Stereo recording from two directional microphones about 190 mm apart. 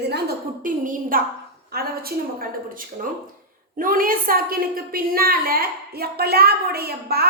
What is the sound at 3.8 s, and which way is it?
A woman's voice, 50° right (ahead or behind).